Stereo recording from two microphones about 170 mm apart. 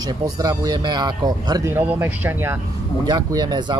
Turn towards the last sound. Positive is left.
turn(degrees=-25)  # may be behind; listen again after turning